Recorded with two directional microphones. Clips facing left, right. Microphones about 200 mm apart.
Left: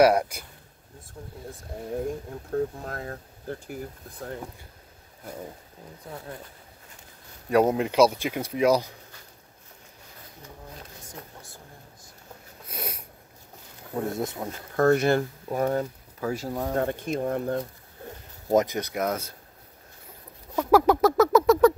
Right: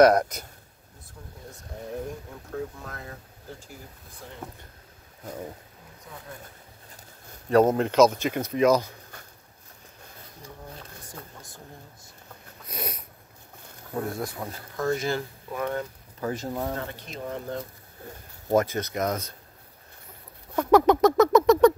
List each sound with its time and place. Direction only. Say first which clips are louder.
0.0 s speech: right 2 dB; 10° left (ahead or behind)
2.5 s speech: left 6 dB; 40° left (ahead or behind); by 3.7 s 60° left (ahead or behind)
7.4 s speech: right 2 dB; 10° left (ahead or behind)
12.6 s snort: right 1 dB; 10° left (ahead or behind)
14.0 s speech: left 2 dB; 25° left (ahead or behind)
14.8 s speech: left 7 dB; 60° left (ahead or behind)
15.4 s speech: left 4 dB; 40° left (ahead or behind)
16.2 s speech: left 1 dB; 5° left (ahead or behind)
16.7 s speech: left 9 dB; 50° left (ahead or behind)
18.5 s speech: left 1 dB; 15° left (ahead or behind)
20.5 s a sound: right 1 dB; 5° left (ahead or behind)